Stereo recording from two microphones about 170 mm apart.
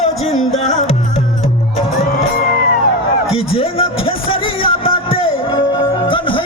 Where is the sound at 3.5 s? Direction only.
35° left (ahead or behind).